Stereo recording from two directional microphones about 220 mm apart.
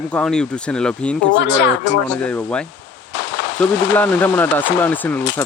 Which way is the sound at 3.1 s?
55° left (ahead or behind).